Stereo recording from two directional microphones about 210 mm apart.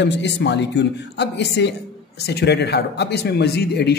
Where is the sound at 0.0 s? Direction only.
55° left (ahead or behind).